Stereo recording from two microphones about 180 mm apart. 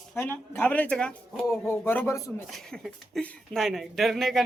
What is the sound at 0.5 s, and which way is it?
Speech, 10° left (ahead or behind).